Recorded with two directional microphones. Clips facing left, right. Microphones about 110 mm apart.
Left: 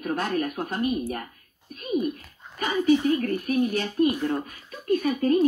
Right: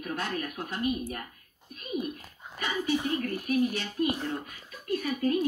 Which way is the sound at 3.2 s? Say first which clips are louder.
Left 3 dB; 50° left (ahead or behind).